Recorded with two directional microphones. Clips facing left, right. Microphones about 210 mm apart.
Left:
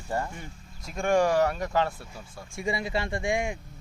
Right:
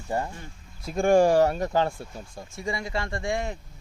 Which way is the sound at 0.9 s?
35° right (ahead or behind).